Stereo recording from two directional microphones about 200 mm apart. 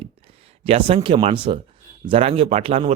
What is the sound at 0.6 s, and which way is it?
Speech, 30° right (ahead or behind).